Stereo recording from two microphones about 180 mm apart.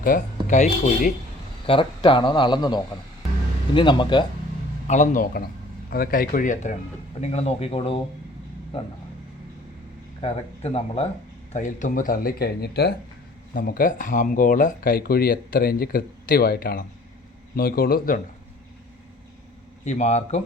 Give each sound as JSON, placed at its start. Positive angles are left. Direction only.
{"t": 0.0, "sound": "speech", "side_deg": 50}
{"t": 1.6, "sound": "speech", "side_deg": 30}
{"t": 4.9, "sound": "speech", "side_deg": 45}
{"t": 10.2, "sound": "speech", "side_deg": 35}
{"t": 11.5, "sound": "a man's voice", "side_deg": 45}
{"t": 13.5, "sound": "a man's voice", "side_deg": 50}
{"t": 19.8, "sound": "speech", "side_deg": 40}